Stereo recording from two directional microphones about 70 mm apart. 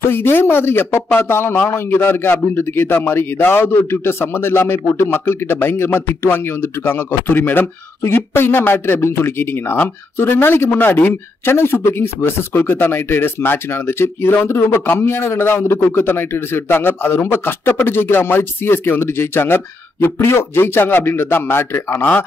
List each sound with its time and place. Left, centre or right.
0.0 s a man's voice: left